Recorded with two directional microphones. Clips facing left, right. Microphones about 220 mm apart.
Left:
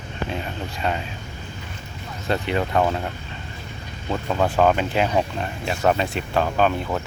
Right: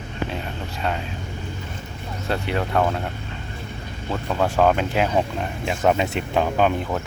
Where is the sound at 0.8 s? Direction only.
Centre (ahead or behind).